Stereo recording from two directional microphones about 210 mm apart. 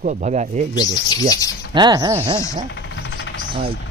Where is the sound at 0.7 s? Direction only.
15° left (ahead or behind).